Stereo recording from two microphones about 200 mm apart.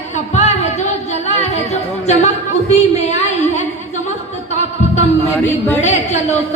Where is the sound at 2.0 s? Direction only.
35° left (ahead or behind).